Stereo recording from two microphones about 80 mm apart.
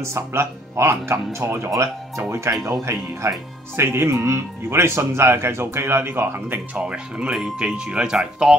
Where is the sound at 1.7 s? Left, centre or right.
Right.